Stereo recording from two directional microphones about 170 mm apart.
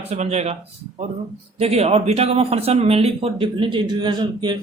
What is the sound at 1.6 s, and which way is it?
Speech, 40° right (ahead or behind).